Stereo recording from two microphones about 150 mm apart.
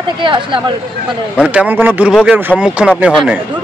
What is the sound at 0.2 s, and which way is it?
Speech, 30° right (ahead or behind).